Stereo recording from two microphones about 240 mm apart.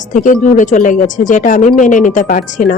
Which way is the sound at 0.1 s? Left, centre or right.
Left.